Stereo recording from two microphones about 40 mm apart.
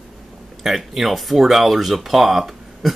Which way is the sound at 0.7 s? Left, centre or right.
Centre.